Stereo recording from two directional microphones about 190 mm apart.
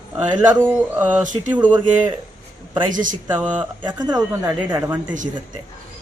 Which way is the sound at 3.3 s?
10° right (ahead or behind).